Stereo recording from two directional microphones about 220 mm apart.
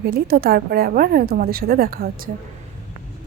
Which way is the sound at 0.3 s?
45° right (ahead or behind).